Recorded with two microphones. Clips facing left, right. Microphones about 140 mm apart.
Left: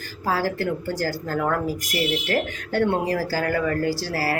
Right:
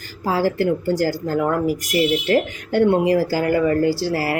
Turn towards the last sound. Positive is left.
turn(degrees=-20)  # may be behind; listen again after turning